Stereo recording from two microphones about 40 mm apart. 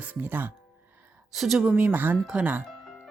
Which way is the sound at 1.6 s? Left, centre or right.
Right.